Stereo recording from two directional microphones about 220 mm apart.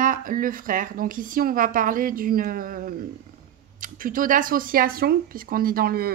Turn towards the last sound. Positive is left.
turn(degrees=-45)  # may be behind; listen again after turning